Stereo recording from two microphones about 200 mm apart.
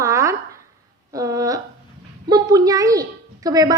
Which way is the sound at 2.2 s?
20° right (ahead or behind).